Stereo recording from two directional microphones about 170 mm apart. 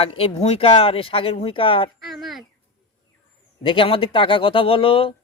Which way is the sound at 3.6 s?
30° left (ahead or behind).